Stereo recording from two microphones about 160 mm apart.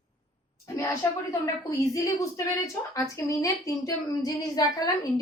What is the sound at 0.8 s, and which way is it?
A woman's voice, 20° left (ahead or behind).